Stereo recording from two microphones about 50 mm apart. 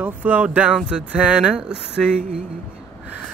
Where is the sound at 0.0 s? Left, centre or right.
Right.